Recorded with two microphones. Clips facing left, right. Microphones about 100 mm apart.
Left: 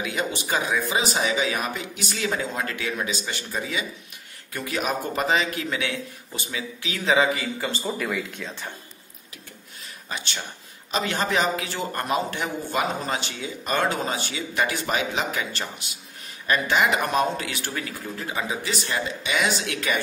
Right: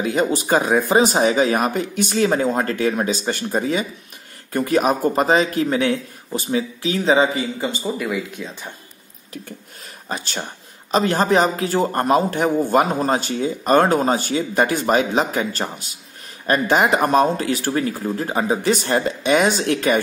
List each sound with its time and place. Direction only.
0.0 s a man's voice: 40° right (ahead or behind)
7.8 s speech: 5° right (ahead or behind)
10.0 s a man's voice: 40° right (ahead or behind)